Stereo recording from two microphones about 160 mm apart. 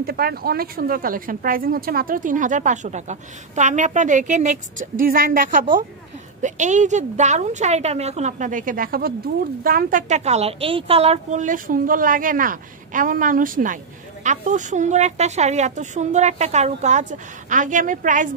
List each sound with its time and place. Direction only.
0.0 s a woman's voice: 75° right (ahead or behind); by 18.3 s 55° right (ahead or behind)